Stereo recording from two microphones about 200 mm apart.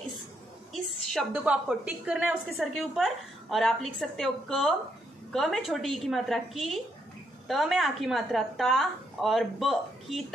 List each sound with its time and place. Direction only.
0.7 s a woman's voice: 5° right (ahead or behind)